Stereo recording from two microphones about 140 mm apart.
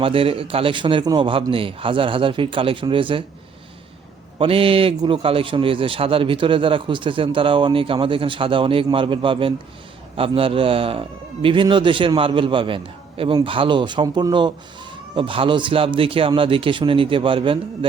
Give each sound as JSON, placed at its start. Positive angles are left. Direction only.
{"t": 0.0, "sound": "a man's voice", "side_deg": -40}
{"t": 4.4, "sound": "a man's voice", "side_deg": -40}